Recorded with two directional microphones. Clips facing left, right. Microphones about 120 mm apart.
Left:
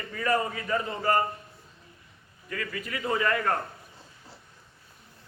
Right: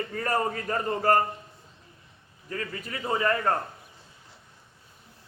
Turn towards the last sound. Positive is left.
turn(degrees=-30)  # may be behind; listen again after turning